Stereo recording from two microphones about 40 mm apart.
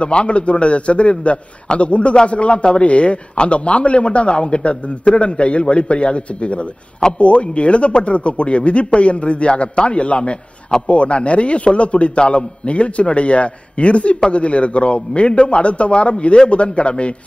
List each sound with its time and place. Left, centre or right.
0.0 s a man's voice: left